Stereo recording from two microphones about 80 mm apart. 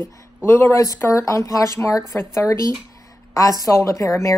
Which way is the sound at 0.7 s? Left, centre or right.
Left.